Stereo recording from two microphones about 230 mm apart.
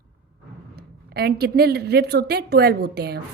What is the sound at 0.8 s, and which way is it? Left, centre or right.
A woman's voice, right.